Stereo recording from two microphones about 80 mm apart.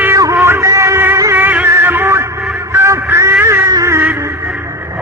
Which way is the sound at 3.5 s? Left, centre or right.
Right.